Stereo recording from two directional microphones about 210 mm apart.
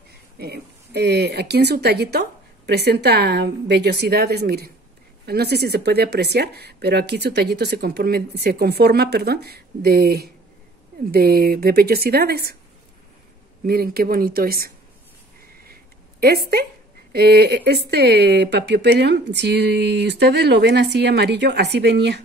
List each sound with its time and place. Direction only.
0.4 s speech: 50° right (ahead or behind)
13.7 s speech: 45° right (ahead or behind)
15.7 s a sound: 45° right (ahead or behind)
17.1 s speech: 50° right (ahead or behind)